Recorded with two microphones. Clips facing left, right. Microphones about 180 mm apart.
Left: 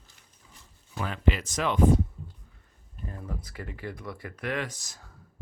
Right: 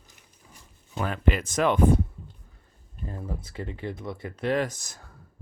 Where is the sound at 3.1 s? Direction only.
25° right (ahead or behind).